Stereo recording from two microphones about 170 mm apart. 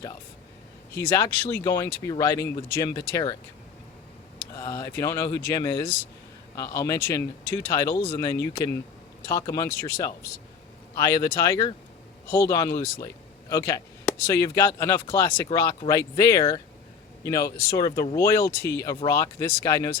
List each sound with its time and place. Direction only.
0.9 s speech: 15° left (ahead or behind)
4.5 s speech: 20° left (ahead or behind)